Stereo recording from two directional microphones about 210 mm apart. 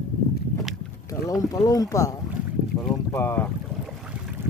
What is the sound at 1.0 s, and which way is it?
Speech, 15° left (ahead or behind).